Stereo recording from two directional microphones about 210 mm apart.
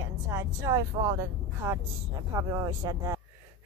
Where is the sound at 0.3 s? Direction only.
15° right (ahead or behind).